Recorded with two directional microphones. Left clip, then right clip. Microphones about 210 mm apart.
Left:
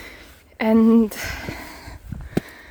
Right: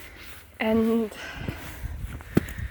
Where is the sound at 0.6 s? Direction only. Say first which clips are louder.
Left 7 dB; 45° left (ahead or behind).